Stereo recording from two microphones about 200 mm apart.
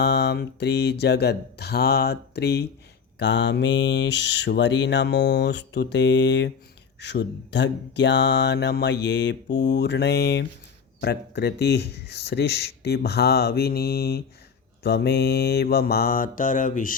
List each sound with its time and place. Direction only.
0.0 s mantra: 55° left (ahead or behind)
11.0 s speech: 55° left (ahead or behind)